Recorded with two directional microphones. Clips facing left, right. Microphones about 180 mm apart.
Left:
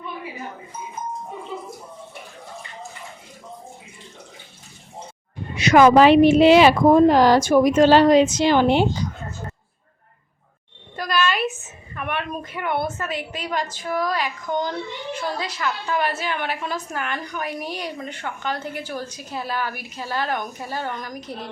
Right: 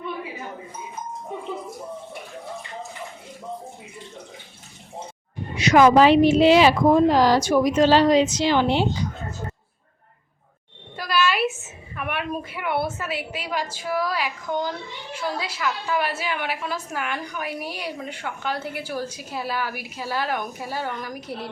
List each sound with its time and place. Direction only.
5.5 s a woman's voice: 60° left (ahead or behind)
10.9 s a sound: 5° right (ahead or behind)
11.9 s a woman's voice: 5° right (ahead or behind)